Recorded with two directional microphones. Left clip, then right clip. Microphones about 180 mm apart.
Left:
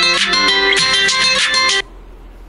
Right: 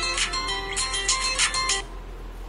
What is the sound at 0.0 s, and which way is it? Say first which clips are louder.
Music: left 14 dB; 90° left.